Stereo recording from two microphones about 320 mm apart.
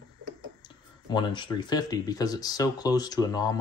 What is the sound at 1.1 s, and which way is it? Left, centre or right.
Speech, centre.